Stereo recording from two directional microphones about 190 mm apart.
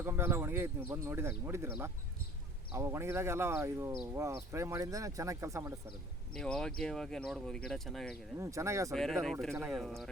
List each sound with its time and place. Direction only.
0.0 s speech: 10° right (ahead or behind)
6.3 s speech: 5° left (ahead or behind)
8.4 s speech: 15° right (ahead or behind)
8.9 s speech: centre (ahead or behind)